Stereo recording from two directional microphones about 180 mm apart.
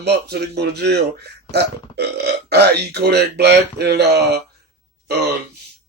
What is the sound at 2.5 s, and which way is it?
Speech, 65° right (ahead or behind).